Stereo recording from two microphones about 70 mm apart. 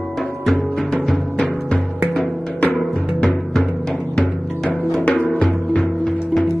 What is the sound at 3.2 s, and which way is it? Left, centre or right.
Timpani, centre.